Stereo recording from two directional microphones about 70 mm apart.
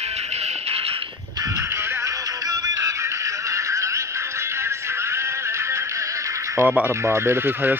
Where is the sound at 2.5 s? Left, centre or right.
Right.